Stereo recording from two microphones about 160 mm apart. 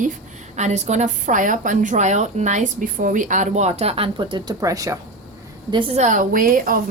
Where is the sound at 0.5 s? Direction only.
45° right (ahead or behind); by 4.9 s 20° right (ahead or behind).